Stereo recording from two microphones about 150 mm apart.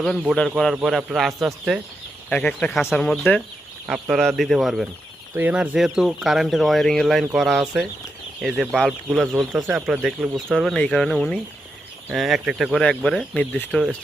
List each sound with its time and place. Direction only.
0.0 s speech: 5° left (ahead or behind)
5.3 s speech: 10° right (ahead or behind)
9.3 s speech: 15° right (ahead or behind); by 13.9 s 5° left (ahead or behind)